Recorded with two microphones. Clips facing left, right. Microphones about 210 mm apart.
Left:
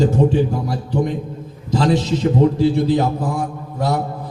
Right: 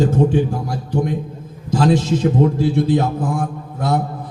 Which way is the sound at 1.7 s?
50° right (ahead or behind).